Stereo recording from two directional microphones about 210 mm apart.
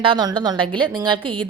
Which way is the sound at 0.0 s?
20° right (ahead or behind).